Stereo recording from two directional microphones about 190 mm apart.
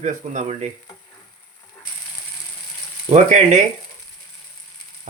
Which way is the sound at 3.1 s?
40° right (ahead or behind).